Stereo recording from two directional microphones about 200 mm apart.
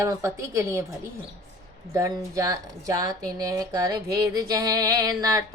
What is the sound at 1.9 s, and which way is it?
Music, 15° right (ahead or behind).